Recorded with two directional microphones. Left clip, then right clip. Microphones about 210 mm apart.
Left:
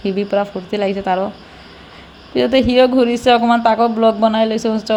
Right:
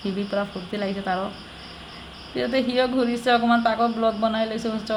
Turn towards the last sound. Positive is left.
turn(degrees=30)  # may be behind; listen again after turning